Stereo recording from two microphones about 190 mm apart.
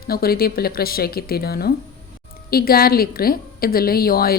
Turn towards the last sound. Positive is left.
turn(degrees=50)  # may be behind; listen again after turning